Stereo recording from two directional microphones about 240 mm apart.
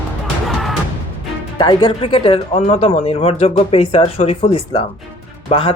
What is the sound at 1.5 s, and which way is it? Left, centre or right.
Speech, centre.